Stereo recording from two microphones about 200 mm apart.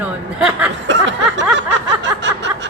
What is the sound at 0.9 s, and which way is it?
Snicker, 65° right (ahead or behind).